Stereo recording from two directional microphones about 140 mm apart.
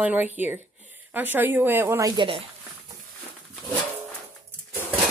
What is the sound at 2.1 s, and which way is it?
Speech, 35° right (ahead or behind).